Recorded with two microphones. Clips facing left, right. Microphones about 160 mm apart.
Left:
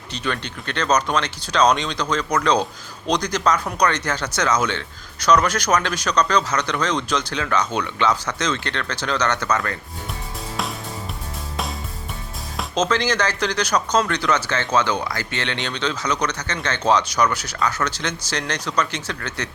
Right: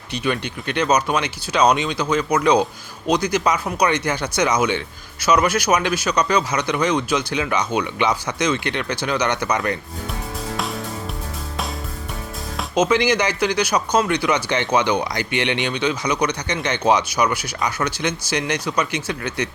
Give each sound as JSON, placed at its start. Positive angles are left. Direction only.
{"t": 0.1, "sound": "speech", "side_deg": -10}
{"t": 12.7, "sound": "speech", "side_deg": -10}